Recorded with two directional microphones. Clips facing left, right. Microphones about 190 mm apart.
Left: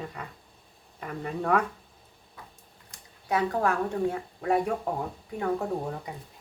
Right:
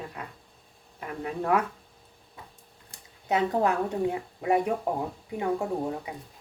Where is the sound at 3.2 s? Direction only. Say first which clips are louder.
Right 1 dB; 20° right (ahead or behind).